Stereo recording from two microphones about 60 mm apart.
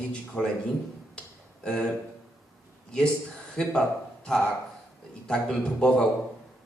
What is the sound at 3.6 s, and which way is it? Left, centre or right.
Speech, centre.